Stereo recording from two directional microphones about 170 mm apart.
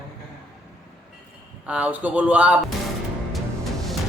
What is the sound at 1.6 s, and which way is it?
Speech, 5° right (ahead or behind).